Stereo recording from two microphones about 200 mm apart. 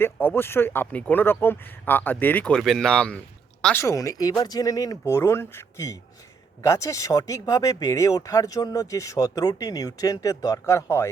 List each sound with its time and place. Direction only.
0.0 s speech: 10° left (ahead or behind)